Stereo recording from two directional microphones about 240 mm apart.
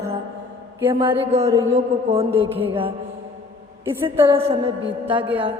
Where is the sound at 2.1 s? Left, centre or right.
Right.